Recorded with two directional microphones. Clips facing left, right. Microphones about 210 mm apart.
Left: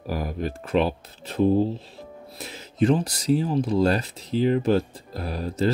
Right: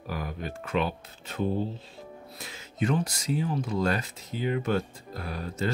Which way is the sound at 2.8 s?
35° left (ahead or behind).